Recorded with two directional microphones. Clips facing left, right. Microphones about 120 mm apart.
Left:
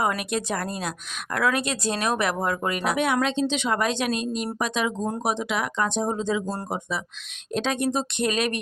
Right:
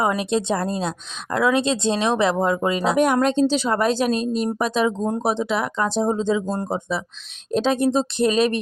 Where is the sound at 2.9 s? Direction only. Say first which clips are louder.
Right 6 dB; 45° right (ahead or behind).